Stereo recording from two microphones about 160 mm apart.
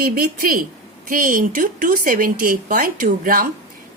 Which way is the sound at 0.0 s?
65° right (ahead or behind).